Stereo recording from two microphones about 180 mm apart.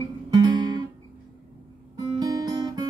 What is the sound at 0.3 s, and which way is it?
Guitar, 20° right (ahead or behind).